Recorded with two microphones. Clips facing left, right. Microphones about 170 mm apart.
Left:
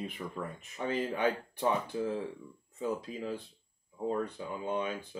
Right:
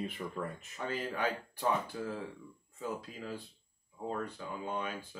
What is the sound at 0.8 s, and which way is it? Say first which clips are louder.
Speech: left 4 dB; 20° left (ahead or behind).